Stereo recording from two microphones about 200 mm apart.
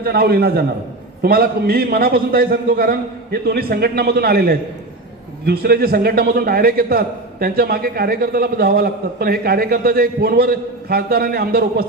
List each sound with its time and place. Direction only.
0.0 s a man's voice: 50° right (ahead or behind)